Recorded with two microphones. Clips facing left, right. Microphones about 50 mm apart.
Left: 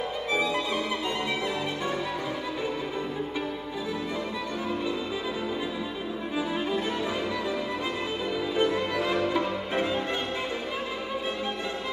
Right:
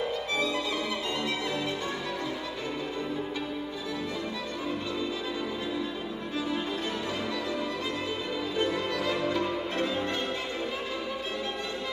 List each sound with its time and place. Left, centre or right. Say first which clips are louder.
8.5 s music: left 3 dB; centre